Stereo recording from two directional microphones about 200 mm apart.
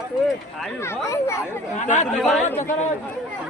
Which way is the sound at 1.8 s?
35° left (ahead or behind).